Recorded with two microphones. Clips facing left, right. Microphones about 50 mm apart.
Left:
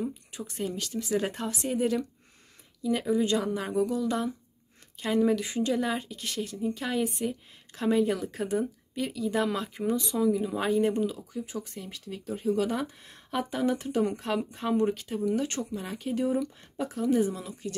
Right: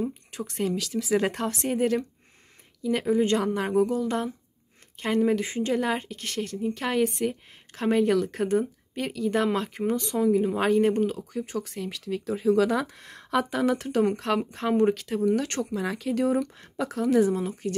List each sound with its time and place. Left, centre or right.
0.3 s a woman's voice: right
5.8 s a woman's voice: right
15.0 s speech: right
15.3 s speech: right
17.3 s a woman's voice: right